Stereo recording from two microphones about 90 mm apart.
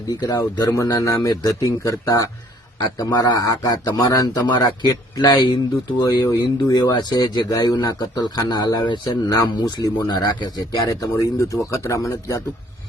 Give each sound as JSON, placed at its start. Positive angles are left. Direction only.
{"t": 0.1, "sound": "speech", "side_deg": 45}